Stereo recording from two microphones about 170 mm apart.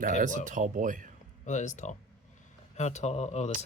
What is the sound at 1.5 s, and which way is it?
Speech, 45° left (ahead or behind).